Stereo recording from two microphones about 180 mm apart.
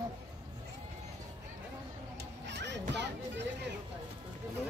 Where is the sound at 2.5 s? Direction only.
75° right (ahead or behind).